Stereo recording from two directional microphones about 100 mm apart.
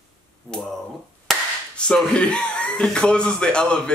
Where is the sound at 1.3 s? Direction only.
Centre (ahead or behind).